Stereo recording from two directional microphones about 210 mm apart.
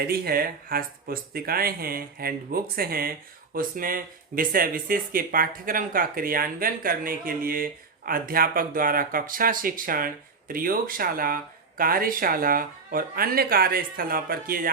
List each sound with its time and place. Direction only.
0.1 s speech: 45° right (ahead or behind)